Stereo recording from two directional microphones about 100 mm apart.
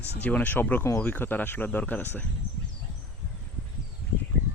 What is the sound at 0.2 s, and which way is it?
Speech, 15° left (ahead or behind).